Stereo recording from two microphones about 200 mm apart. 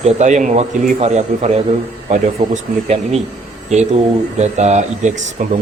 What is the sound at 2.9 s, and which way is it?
Speech, 30° right (ahead or behind).